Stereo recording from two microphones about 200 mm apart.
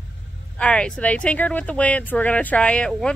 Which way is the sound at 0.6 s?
5° left (ahead or behind).